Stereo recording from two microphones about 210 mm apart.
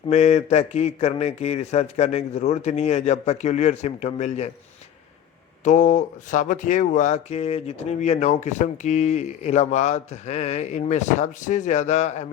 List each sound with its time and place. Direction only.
0.1 s speech: 30° left (ahead or behind)
5.6 s speech: 35° left (ahead or behind)